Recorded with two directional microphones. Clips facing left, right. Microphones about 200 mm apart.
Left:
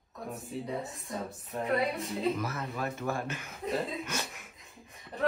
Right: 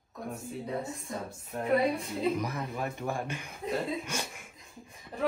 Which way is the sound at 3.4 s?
Centre (ahead or behind).